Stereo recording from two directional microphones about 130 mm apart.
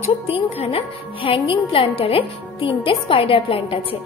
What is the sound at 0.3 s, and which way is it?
A woman's voice, 45° left (ahead or behind).